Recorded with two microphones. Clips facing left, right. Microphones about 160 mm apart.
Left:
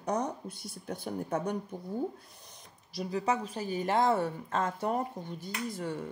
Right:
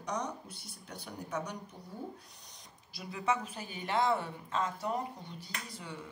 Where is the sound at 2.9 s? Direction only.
35° left (ahead or behind).